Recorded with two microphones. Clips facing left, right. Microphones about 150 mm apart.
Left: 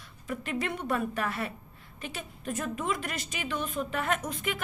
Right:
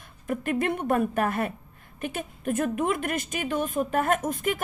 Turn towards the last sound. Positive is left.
turn(degrees=-45)  # may be behind; listen again after turning